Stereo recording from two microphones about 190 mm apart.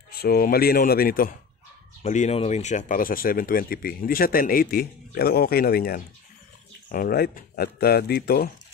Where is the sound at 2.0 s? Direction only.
35° left (ahead or behind).